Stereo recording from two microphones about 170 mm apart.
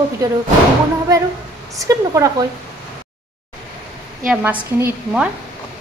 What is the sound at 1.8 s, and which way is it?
Speech, 20° right (ahead or behind).